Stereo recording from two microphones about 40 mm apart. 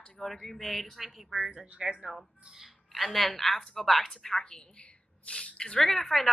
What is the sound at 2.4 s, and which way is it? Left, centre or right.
Speech, centre.